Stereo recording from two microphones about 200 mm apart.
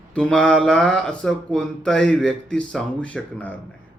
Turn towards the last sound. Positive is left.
turn(degrees=5)  # may be behind; listen again after turning